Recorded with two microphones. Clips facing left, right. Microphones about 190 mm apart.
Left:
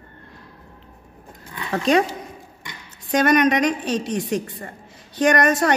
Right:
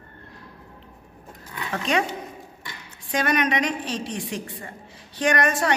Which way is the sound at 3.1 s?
45° left (ahead or behind).